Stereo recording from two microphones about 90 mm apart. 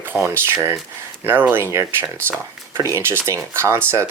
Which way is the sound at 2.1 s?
15° left (ahead or behind).